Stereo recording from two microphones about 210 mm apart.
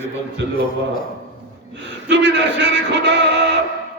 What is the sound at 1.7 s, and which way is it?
Music, 55° right (ahead or behind).